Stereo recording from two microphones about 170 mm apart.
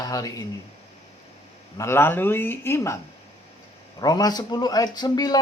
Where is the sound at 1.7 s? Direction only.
15° left (ahead or behind).